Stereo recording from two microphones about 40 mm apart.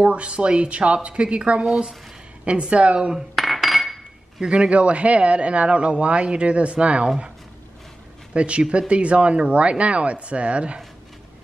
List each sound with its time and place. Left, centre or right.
0.0 s speech: right
3.3 s dishes: centre
4.5 s a man's voice: right
8.3 s speech: right